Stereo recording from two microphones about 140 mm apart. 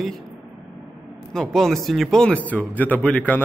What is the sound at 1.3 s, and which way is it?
A man's voice, 5° left (ahead or behind).